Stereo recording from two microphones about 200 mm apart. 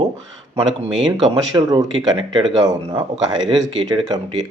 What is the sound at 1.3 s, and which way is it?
Speech, 20° right (ahead or behind).